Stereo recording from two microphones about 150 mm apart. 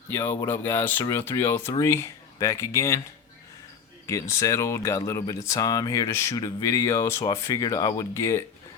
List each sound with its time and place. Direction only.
0.1 s speech: 15° left (ahead or behind)
4.0 s speech: 20° left (ahead or behind)